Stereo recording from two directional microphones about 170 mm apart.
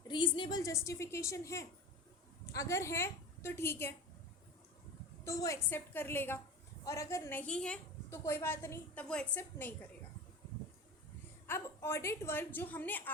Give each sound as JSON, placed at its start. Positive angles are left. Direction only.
{"t": 0.1, "sound": "a woman's voice", "side_deg": 30}
{"t": 5.2, "sound": "a woman's voice", "side_deg": 20}
{"t": 8.2, "sound": "a woman's voice", "side_deg": 15}
{"t": 11.4, "sound": "a woman's voice", "side_deg": 15}